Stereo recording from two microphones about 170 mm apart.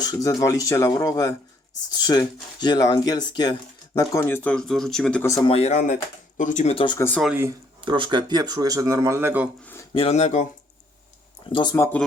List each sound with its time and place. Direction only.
0.0 s speech: 20° left (ahead or behind); by 5.2 s 5° left (ahead or behind)
5.2 s speech: 20° left (ahead or behind)
5.5 s speech: 40° left (ahead or behind)
6.7 s speech: 25° left (ahead or behind)
7.2 s speech: 5° right (ahead or behind)
7.8 s speech: 30° right (ahead or behind); by 9.5 s 10° right (ahead or behind)
9.9 s speech: 35° left (ahead or behind)
11.4 s speech: 30° left (ahead or behind)